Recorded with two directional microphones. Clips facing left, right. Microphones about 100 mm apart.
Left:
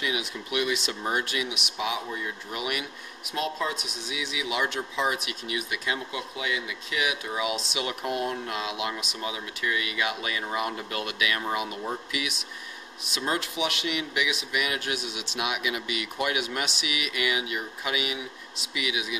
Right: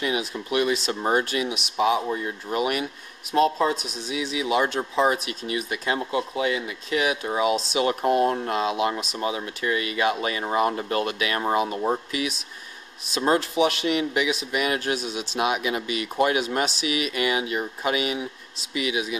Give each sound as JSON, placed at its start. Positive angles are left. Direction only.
{"t": 0.0, "sound": "speech", "side_deg": -35}